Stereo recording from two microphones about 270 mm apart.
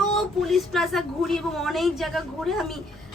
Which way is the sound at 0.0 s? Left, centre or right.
Centre.